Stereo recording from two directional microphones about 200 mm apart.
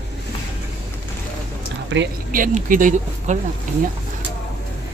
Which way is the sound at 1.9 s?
65° right (ahead or behind).